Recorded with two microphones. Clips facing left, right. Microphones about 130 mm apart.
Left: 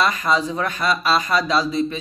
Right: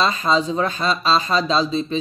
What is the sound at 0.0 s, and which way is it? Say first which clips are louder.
Speech: right 1 dB; 25° right (ahead or behind).